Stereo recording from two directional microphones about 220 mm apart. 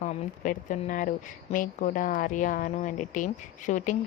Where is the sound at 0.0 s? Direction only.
35° left (ahead or behind).